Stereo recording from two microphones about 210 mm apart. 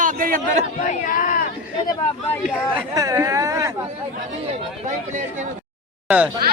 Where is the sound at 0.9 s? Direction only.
40° left (ahead or behind).